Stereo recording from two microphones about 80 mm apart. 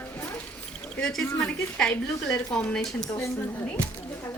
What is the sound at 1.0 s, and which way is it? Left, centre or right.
Speech, centre.